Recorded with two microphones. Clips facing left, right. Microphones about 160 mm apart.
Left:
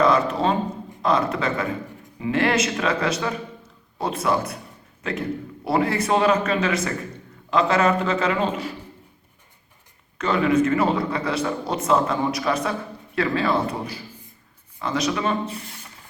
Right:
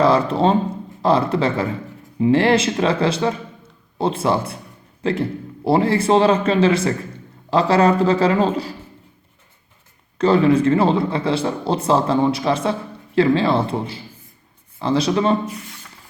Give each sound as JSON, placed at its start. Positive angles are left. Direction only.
{"t": 0.0, "sound": "a man's voice", "side_deg": -30}
{"t": 10.2, "sound": "a man's voice", "side_deg": -30}